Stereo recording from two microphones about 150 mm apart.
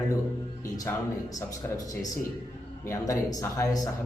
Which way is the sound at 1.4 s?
25° left (ahead or behind).